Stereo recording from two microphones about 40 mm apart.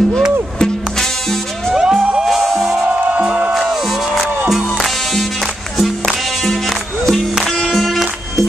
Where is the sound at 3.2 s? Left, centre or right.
Right.